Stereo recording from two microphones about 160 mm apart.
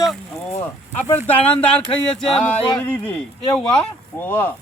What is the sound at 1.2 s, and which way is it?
Speech, 10° left (ahead or behind).